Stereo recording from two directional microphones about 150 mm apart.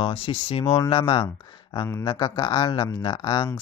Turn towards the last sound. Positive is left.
turn(degrees=30)  # may be behind; listen again after turning